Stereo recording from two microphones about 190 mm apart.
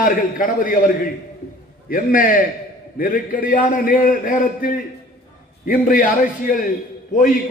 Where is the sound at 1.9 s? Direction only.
45° left (ahead or behind).